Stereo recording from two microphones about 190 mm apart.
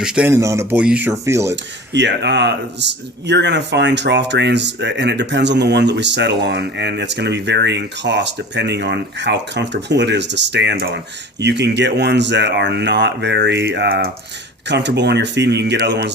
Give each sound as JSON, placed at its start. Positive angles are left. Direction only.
{"t": 0.0, "sound": "speech", "side_deg": -5}
{"t": 1.9, "sound": "speech", "side_deg": -65}
{"t": 14.7, "sound": "speech", "side_deg": -65}